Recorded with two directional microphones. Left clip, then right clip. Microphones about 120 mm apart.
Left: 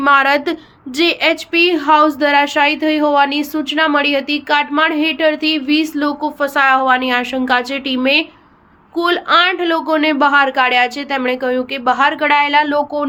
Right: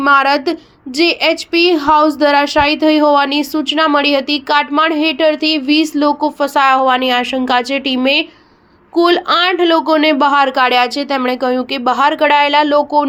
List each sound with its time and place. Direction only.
0.0 s a woman's voice: 15° right (ahead or behind)
1.5 s speech: 35° right (ahead or behind)